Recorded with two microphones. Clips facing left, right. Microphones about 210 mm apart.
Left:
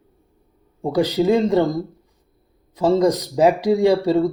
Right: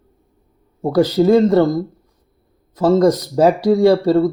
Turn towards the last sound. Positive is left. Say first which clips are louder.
# right 4 dB
turn(degrees=15)  # may be behind; listen again after turning